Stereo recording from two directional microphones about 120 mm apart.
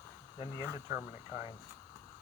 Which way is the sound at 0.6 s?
25° right (ahead or behind).